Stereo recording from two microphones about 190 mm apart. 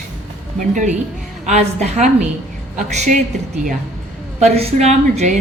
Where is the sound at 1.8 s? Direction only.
40° right (ahead or behind).